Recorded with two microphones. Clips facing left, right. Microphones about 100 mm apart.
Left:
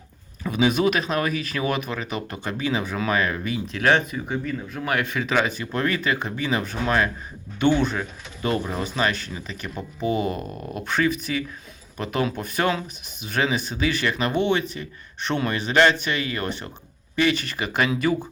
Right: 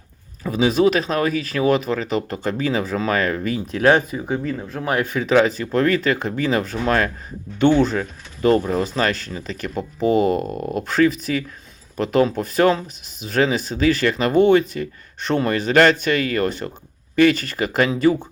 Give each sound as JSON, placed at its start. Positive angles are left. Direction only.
{"t": 0.4, "sound": "speech", "side_deg": -35}